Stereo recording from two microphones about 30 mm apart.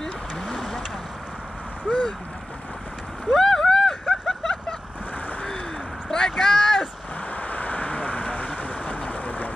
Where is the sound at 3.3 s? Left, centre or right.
Centre.